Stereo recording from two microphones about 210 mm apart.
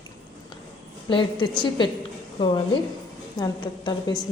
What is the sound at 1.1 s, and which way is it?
A woman's voice, 20° left (ahead or behind).